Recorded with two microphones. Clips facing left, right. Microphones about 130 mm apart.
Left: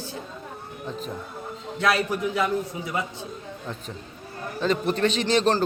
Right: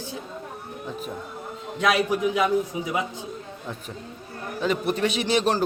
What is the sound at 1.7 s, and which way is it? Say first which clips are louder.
A man's voice: right 2 dB; 15° right (ahead or behind).